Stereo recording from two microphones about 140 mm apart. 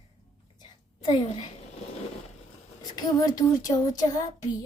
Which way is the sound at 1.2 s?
45° left (ahead or behind).